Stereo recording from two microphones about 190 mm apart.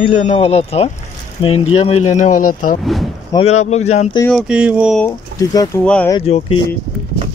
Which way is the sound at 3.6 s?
35° left (ahead or behind).